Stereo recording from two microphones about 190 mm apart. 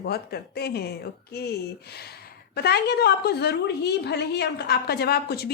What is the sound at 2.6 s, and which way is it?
A woman's voice, 60° left (ahead or behind).